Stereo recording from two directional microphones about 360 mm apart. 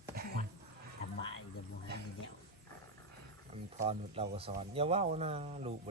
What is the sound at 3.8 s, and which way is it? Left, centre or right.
Speech, centre.